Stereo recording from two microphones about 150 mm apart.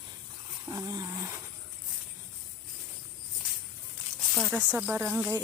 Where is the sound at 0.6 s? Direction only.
25° right (ahead or behind).